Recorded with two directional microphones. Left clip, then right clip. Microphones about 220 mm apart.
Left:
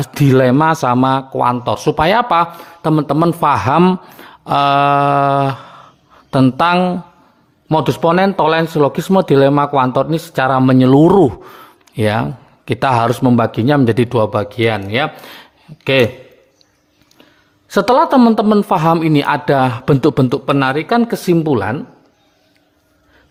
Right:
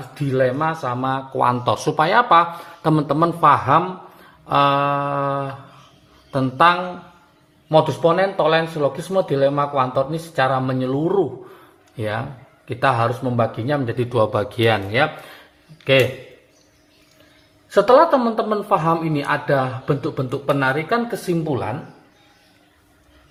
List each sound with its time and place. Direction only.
0.1 s a man's voice: 55° left (ahead or behind)
1.3 s a man's voice: 25° left (ahead or behind); by 14.1 s 50° left (ahead or behind)
14.1 s speech: 25° left (ahead or behind)
14.9 s speech: 35° left (ahead or behind)
15.8 s a man's voice: 45° left (ahead or behind)
17.7 s a man's voice: 45° left (ahead or behind)